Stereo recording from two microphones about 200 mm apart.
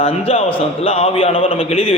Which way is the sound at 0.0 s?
30° left (ahead or behind).